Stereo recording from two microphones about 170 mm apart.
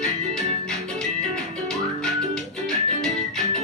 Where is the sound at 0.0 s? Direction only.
5° left (ahead or behind).